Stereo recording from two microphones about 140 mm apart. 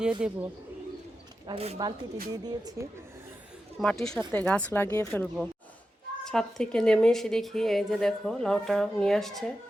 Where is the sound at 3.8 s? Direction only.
5° left (ahead or behind).